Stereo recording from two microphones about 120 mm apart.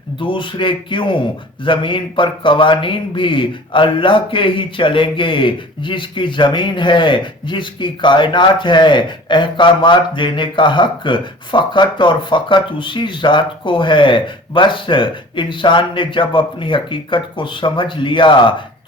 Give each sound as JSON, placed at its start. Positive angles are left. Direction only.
{"t": 0.2, "sound": "a man's voice", "side_deg": 45}